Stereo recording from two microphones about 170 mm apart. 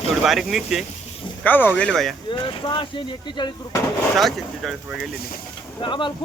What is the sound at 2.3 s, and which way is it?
Speech, 30° left (ahead or behind).